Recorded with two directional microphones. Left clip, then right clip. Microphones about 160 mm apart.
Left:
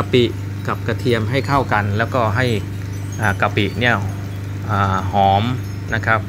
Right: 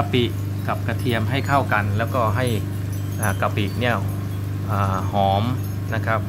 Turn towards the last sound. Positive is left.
turn(degrees=10)  # may be behind; listen again after turning